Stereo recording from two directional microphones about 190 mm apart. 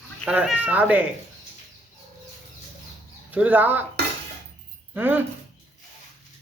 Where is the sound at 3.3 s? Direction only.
10° right (ahead or behind).